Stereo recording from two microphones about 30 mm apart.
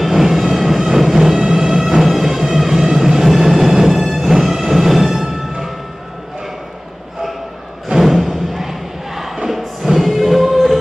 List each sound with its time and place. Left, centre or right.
0.0 s vehicle: centre
2.5 s music: centre
8.0 s crowd: centre